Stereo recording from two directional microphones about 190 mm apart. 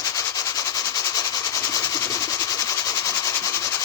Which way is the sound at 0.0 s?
15° left (ahead or behind).